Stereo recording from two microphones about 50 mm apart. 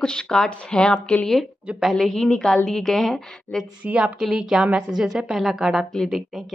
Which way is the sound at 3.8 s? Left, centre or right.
Right.